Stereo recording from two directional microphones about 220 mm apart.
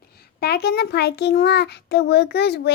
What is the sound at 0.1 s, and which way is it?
A child's voice, 45° left (ahead or behind).